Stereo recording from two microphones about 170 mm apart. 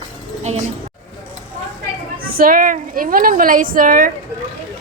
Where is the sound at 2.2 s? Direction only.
55° right (ahead or behind).